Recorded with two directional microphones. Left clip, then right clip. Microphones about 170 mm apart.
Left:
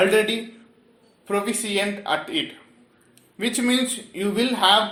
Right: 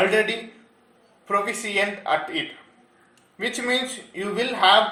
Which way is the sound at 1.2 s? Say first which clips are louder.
Right 1 dB; 30° left (ahead or behind).